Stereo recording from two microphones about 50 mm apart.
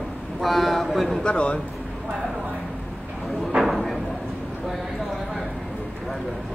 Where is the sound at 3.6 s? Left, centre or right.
Centre.